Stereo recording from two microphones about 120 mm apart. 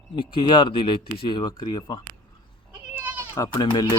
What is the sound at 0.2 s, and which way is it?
Speech, 45° left (ahead or behind).